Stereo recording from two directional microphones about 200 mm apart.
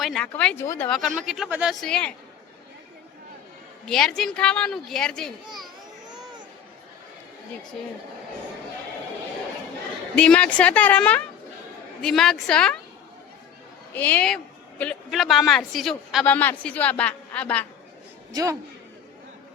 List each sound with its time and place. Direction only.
0.0 s a woman's voice: centre (ahead or behind)
0.9 s a man's voice: centre (ahead or behind)
3.8 s a man's voice: 5° left (ahead or behind)
6.1 s a sound: 20° right (ahead or behind)
10.2 s a man's voice: 5° left (ahead or behind)
13.9 s a man's voice: 10° left (ahead or behind)
18.3 s a man's voice: 20° right (ahead or behind)